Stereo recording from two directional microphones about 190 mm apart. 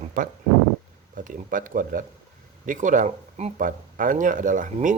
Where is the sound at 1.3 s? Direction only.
45° right (ahead or behind).